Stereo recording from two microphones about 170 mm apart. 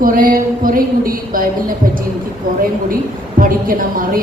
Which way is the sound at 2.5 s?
55° right (ahead or behind).